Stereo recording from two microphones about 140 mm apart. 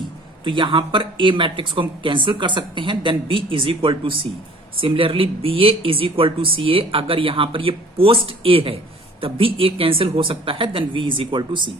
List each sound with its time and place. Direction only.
0.4 s speech: 35° right (ahead or behind)